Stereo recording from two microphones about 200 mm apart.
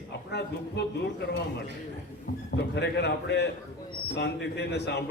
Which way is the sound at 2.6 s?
55° left (ahead or behind).